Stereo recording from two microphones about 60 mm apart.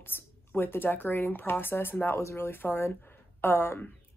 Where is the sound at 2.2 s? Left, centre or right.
Left.